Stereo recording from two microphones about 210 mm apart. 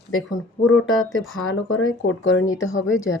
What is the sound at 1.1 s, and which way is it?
Speech, 75° left (ahead or behind).